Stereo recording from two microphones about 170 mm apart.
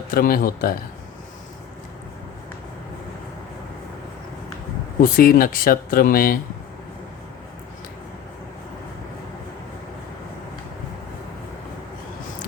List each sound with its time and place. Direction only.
0.1 s speech: 60° left (ahead or behind)
4.9 s speech: 60° left (ahead or behind)